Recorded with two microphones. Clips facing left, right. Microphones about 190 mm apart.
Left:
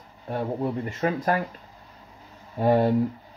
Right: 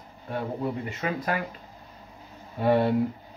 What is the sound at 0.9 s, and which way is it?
Speech, 45° left (ahead or behind).